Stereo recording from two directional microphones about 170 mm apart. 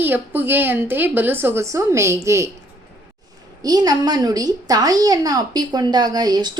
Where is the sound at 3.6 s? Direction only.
20° right (ahead or behind).